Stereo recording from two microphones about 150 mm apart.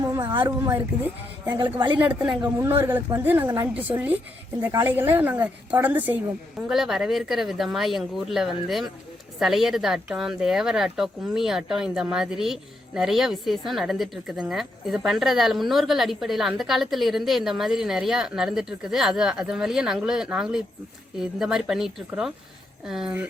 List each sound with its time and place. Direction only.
0.0 s a sound: 25° right (ahead or behind)
0.9 s a woman's voice: 10° right (ahead or behind)
1.5 s a woman's voice: 30° right (ahead or behind)
2.0 s a woman's voice: 10° right (ahead or behind)